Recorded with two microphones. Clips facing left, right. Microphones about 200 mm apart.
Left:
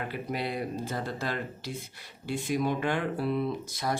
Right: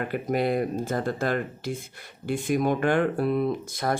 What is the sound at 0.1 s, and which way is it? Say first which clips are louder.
Speech: right 8 dB; 50° right (ahead or behind).